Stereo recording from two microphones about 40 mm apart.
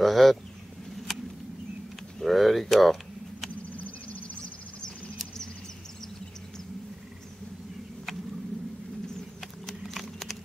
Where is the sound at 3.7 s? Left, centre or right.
Left.